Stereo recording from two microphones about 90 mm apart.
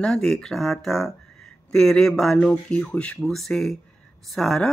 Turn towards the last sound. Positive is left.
turn(degrees=5)  # may be behind; listen again after turning